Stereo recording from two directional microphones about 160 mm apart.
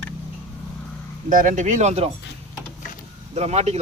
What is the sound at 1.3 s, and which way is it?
Speech, 55° right (ahead or behind).